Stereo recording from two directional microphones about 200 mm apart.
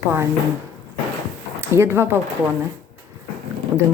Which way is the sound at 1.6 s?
10° right (ahead or behind).